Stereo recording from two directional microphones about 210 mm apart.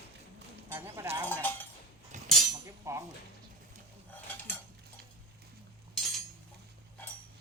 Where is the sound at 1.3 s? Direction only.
10° left (ahead or behind).